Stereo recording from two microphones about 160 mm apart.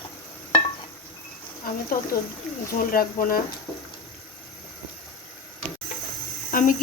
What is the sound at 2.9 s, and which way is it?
Cricket, 65° left (ahead or behind).